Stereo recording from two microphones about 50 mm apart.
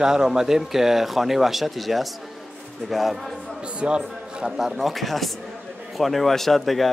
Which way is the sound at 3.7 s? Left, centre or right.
Right.